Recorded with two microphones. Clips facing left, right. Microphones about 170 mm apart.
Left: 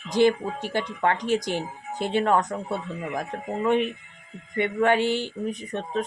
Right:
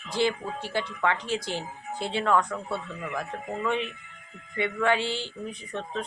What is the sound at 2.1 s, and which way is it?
Speech, 50° left (ahead or behind).